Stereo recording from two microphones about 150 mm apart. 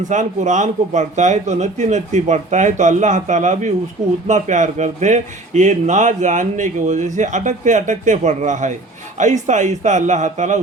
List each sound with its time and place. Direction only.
0.0 s speech: 55° right (ahead or behind)